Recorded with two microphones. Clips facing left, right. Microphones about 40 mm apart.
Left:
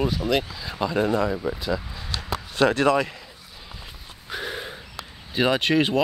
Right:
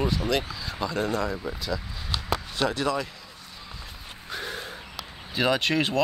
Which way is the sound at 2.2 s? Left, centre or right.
Left.